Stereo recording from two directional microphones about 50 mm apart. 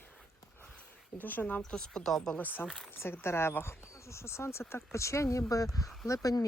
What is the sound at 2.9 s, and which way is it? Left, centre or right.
Speech, left.